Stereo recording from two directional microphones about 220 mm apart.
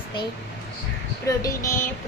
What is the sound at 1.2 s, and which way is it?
Music, 15° left (ahead or behind).